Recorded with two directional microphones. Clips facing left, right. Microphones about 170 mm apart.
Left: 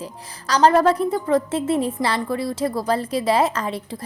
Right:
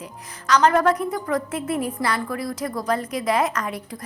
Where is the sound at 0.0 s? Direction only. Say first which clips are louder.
Left 2 dB; 35° left (ahead or behind).